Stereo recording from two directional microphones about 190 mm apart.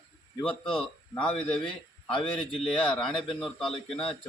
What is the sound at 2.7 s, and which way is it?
Speech, 25° left (ahead or behind).